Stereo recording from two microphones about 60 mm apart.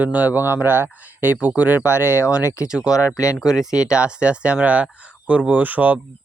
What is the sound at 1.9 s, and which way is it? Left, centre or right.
Speech, left.